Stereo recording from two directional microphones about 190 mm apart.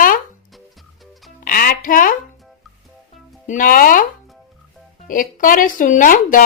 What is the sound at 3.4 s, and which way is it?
Speech, 45° left (ahead or behind).